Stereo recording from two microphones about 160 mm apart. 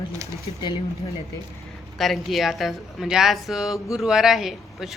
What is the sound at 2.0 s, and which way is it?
A woman's voice, centre (ahead or behind).